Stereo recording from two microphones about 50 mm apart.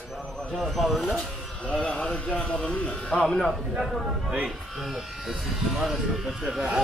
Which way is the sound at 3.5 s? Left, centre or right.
Centre.